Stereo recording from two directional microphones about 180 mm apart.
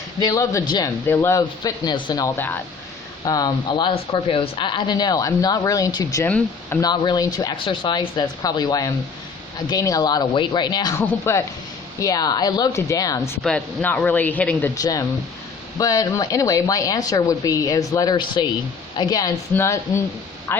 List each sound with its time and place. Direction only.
0.2 s speech: 20° left (ahead or behind)
6.9 s speech: 25° left (ahead or behind)
11.0 s speech: 10° left (ahead or behind)
14.8 s speech: 20° left (ahead or behind)